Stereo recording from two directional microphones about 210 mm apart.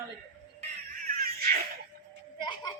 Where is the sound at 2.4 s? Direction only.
20° left (ahead or behind).